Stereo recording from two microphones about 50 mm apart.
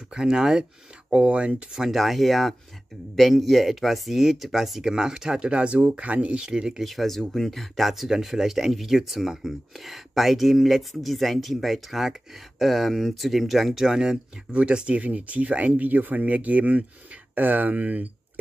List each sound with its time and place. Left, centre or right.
0.1 s speech: centre
6.8 s speech: centre; by 18.4 s right